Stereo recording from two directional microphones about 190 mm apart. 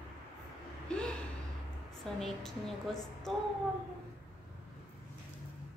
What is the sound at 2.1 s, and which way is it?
Speech, centre (ahead or behind).